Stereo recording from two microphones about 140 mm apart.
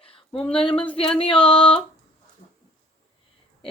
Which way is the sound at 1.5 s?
35° left (ahead or behind).